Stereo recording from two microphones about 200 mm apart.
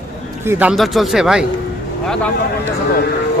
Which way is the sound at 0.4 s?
5° right (ahead or behind).